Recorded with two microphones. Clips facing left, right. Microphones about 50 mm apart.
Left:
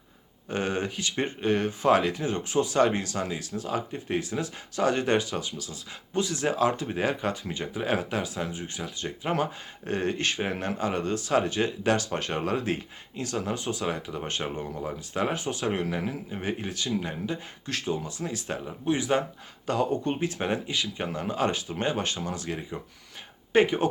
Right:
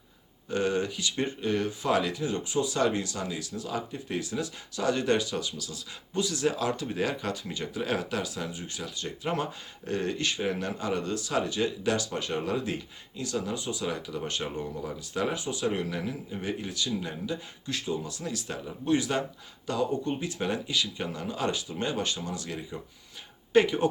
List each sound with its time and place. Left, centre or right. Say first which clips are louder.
0.4 s speech: right 1 dB; left
18.6 s speech: right 2 dB; left
19.6 s speech: left 2 dB; left